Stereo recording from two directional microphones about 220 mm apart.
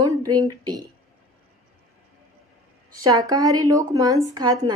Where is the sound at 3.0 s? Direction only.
15° right (ahead or behind).